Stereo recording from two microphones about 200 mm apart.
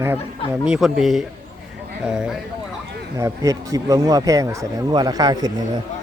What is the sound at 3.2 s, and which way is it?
Speech, 15° right (ahead or behind).